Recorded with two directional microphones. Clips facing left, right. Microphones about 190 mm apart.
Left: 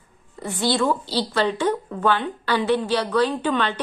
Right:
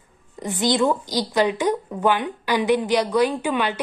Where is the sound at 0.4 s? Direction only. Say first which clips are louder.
Right 2 dB; 15° right (ahead or behind).